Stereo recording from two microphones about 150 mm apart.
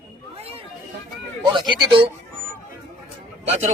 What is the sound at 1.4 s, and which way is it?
Speech, 30° right (ahead or behind).